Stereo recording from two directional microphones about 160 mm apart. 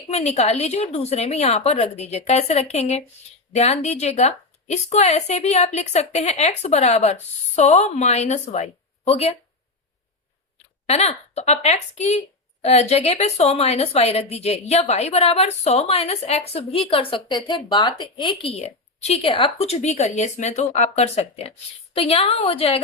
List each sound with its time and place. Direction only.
0.1 s a woman's voice: 40° left (ahead or behind)
10.8 s a woman's voice: 40° left (ahead or behind)